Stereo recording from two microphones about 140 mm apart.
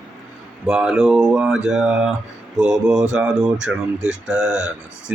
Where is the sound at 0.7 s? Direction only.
5° right (ahead or behind).